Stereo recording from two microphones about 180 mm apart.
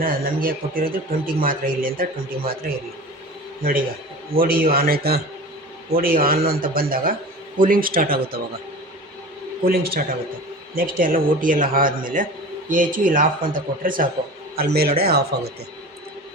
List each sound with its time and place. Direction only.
0.0 s speech: 55° right (ahead or behind)
9.6 s speech: 55° right (ahead or behind)